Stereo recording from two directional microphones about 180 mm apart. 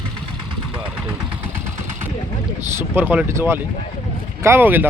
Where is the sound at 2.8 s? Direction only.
10° right (ahead or behind).